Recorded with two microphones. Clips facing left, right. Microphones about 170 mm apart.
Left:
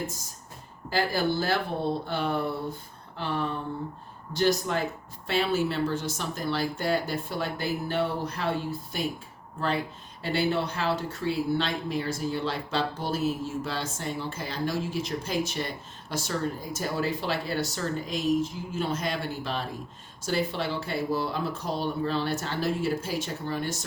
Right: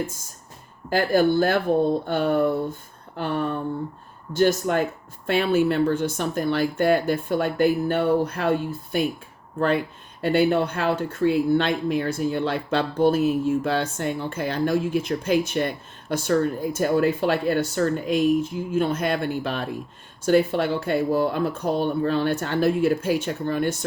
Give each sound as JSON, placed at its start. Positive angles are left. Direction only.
{"t": 0.9, "sound": "speech", "side_deg": -50}